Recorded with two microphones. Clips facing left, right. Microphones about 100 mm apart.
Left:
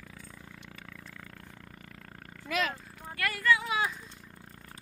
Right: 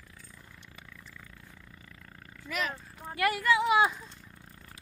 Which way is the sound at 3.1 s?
20° right (ahead or behind).